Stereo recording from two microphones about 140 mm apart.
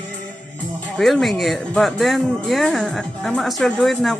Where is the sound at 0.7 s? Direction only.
5° left (ahead or behind).